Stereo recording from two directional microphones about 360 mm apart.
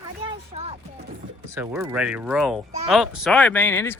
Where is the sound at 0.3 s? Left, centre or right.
Centre.